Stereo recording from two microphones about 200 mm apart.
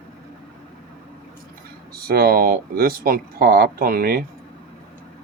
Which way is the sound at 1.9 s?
50° right (ahead or behind).